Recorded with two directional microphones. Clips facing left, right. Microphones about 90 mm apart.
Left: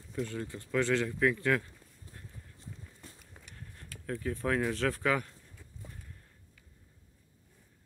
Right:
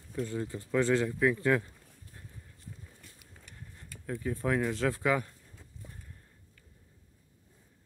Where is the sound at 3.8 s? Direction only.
10° right (ahead or behind).